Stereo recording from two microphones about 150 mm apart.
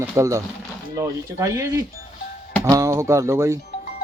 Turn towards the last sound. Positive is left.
turn(degrees=-20)  # may be behind; listen again after turning